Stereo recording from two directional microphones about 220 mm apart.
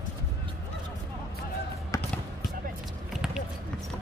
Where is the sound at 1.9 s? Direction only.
15° left (ahead or behind).